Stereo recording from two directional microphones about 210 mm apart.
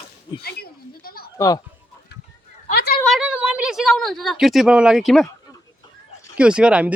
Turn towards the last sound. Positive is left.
turn(degrees=-5)  # may be behind; listen again after turning